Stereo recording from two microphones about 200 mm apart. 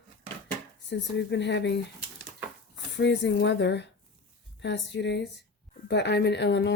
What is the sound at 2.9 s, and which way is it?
Speech, 60° left (ahead or behind).